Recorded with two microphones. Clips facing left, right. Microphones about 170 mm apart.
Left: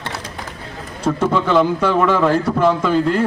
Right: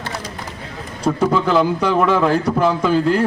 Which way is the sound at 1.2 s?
5° right (ahead or behind).